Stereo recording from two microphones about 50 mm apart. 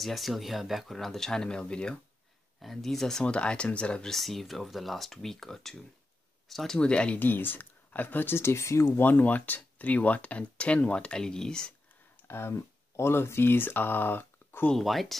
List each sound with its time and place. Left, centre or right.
0.0 s speech: centre
2.6 s speech: centre
3.2 s speech: left
4.1 s speech: centre
6.8 s speech: left
7.2 s speech: left
9.0 s speech: left; by 11.7 s centre
12.3 s speech: left
14.8 s speech: centre